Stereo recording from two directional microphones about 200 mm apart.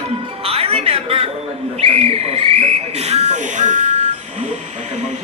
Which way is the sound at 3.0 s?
30° right (ahead or behind).